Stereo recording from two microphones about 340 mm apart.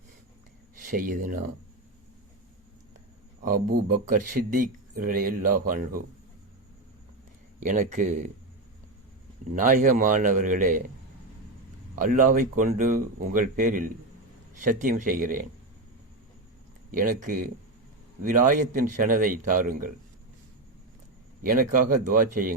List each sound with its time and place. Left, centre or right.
0.8 s speech: right
3.4 s speech: right
7.6 s speech: right
9.6 s speech: right
11.9 s speech: right
16.9 s speech: right
21.4 s speech: right